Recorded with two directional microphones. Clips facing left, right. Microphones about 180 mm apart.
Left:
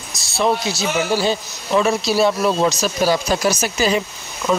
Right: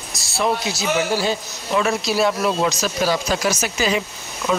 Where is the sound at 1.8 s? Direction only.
30° left (ahead or behind).